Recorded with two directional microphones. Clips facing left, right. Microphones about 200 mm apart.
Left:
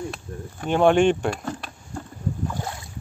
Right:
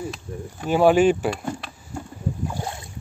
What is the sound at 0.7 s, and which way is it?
Speech, 5° right (ahead or behind).